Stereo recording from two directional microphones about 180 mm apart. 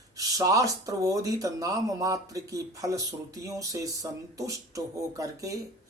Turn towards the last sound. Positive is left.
turn(degrees=-20)  # may be behind; listen again after turning